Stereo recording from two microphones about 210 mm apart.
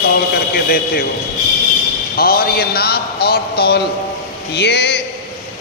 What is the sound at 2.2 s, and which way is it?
A man's voice, 45° left (ahead or behind).